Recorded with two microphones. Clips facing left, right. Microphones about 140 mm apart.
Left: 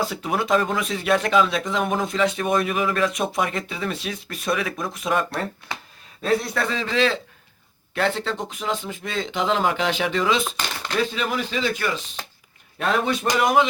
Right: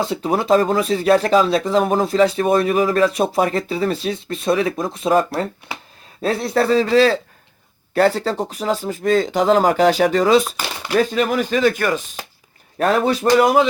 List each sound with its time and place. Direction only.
0.1 s speech: 30° right (ahead or behind)
6.2 s speech: 35° right (ahead or behind)